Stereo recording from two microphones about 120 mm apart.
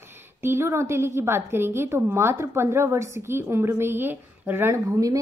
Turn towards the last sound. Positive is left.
turn(degrees=-30)  # may be behind; listen again after turning